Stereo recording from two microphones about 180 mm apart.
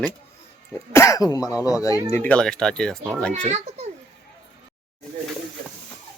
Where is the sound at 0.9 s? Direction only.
20° left (ahead or behind).